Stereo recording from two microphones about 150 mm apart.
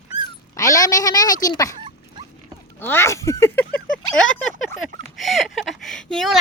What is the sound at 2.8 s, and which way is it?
Speech, 15° left (ahead or behind).